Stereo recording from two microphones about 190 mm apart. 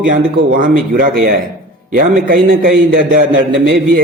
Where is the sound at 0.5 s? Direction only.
45° right (ahead or behind).